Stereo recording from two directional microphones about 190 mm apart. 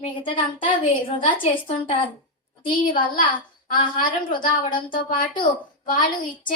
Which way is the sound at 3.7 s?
25° left (ahead or behind).